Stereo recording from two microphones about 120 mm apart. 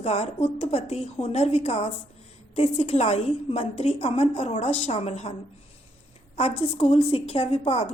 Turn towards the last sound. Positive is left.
turn(degrees=55)  # may be behind; listen again after turning